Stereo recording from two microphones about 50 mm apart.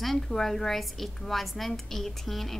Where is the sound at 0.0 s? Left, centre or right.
Centre.